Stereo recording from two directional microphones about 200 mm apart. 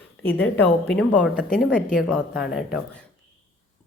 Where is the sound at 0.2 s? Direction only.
10° left (ahead or behind).